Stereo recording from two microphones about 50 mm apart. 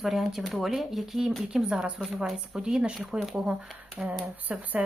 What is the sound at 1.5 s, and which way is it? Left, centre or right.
Speech, centre.